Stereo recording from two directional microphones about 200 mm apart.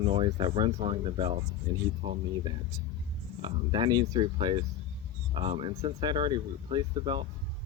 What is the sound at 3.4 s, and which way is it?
Speech, 20° right (ahead or behind).